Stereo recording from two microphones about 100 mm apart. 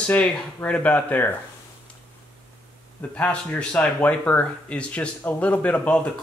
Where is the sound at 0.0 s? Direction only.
15° left (ahead or behind).